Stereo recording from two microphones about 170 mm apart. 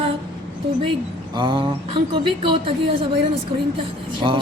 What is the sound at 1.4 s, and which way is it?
A man's voice, 30° right (ahead or behind).